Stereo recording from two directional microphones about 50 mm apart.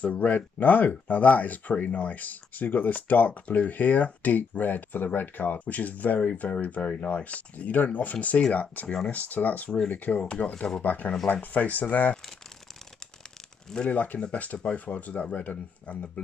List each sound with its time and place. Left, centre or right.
0.0 s speech: left
13.8 s speech: left